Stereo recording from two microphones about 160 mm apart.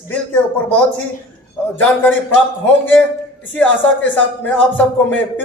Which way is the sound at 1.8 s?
10° left (ahead or behind).